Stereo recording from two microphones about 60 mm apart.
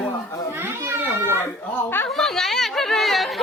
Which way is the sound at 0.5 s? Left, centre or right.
Right.